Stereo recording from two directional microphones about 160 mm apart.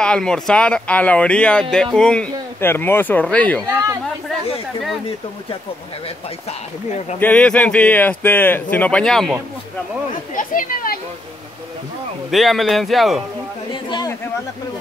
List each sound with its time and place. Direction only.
0.0 s speech: 5° left (ahead or behind)
7.2 s speech: 10° left (ahead or behind)
10.3 s speech: 60° left (ahead or behind)
12.3 s speech: centre (ahead or behind)
13.8 s speech: 25° left (ahead or behind)